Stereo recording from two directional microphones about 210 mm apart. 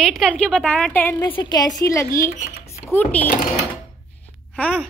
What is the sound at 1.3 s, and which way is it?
A woman's voice, 20° left (ahead or behind).